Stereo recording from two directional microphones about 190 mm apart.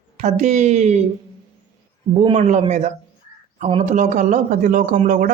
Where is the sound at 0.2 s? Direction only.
40° right (ahead or behind).